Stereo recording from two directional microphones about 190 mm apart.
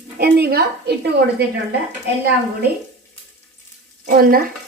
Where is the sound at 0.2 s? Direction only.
55° right (ahead or behind).